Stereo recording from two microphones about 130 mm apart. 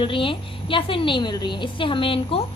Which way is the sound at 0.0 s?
40° left (ahead or behind).